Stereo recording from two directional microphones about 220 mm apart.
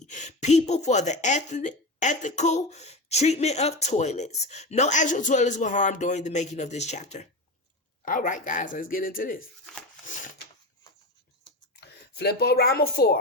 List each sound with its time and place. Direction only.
0.0 s speech: 35° left (ahead or behind)
11.8 s speech: 45° left (ahead or behind)